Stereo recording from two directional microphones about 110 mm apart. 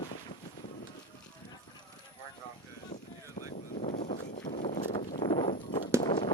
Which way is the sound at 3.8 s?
90° left.